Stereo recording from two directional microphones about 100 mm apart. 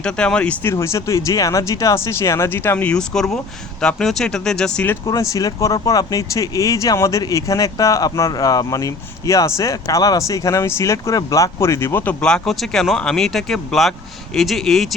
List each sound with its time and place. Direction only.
0.0 s speech: 10° left (ahead or behind)
0.6 s speech: 25° left (ahead or behind); by 4.9 s 10° left (ahead or behind)
5.3 s speech: 35° left (ahead or behind)
12.2 s speech: 5° left (ahead or behind)